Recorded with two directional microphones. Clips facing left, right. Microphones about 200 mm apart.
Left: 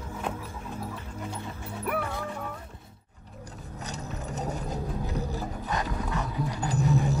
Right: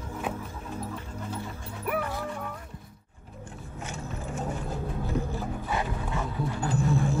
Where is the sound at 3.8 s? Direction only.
40° left (ahead or behind).